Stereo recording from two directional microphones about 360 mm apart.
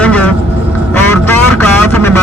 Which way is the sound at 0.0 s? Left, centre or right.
Centre.